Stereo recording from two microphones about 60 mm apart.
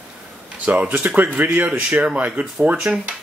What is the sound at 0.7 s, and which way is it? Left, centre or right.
Speech, right.